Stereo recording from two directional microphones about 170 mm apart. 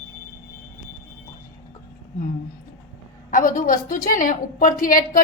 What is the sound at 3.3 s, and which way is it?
A woman's voice, 50° left (ahead or behind).